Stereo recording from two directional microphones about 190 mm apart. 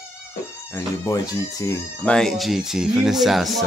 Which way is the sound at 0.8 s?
20° left (ahead or behind).